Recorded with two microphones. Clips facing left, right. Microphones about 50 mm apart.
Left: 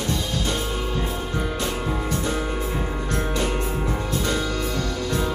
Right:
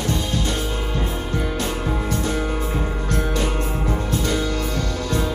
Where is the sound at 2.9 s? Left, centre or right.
Centre.